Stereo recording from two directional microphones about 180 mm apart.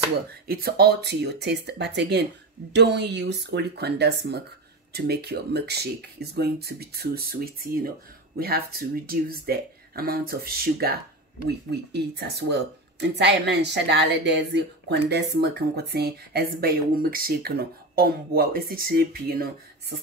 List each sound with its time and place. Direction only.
0.5 s speech: 55° right (ahead or behind)